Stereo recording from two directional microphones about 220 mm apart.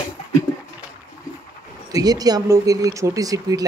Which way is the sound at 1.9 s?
15° right (ahead or behind).